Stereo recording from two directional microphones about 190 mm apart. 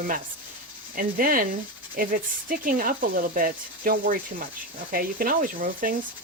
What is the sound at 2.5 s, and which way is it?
Speech, 45° right (ahead or behind).